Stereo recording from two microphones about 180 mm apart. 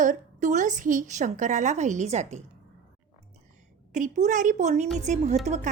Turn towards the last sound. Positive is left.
turn(degrees=-40)  # may be behind; listen again after turning